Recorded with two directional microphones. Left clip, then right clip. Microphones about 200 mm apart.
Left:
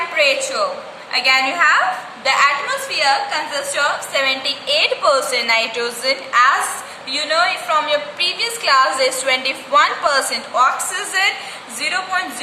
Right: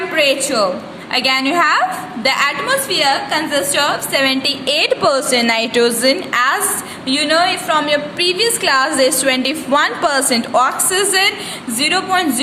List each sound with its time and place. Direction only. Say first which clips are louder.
0.2 s a woman's voice: right 2 dB; 40° right (ahead or behind)